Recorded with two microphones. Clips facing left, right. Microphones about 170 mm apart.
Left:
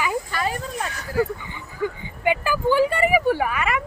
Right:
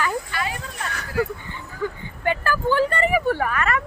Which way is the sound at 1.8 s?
15° left (ahead or behind).